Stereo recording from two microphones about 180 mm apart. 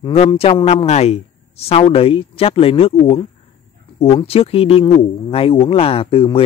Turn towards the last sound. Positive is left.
turn(degrees=30)  # may be behind; listen again after turning